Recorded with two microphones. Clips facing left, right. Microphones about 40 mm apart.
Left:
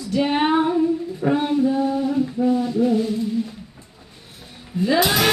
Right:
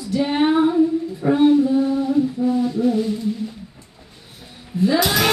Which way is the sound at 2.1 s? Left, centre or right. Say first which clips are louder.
Right 1 dB; centre.